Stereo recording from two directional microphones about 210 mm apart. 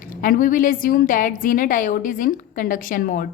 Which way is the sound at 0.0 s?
40° left (ahead or behind).